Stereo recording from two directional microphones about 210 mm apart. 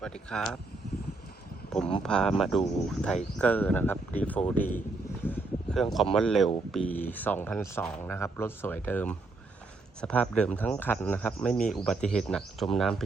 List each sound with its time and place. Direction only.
0.0 s speech: 5° left (ahead or behind)
2.0 s speech: centre (ahead or behind)
5.2 s a sound: 5° left (ahead or behind)
6.1 s speech: centre (ahead or behind)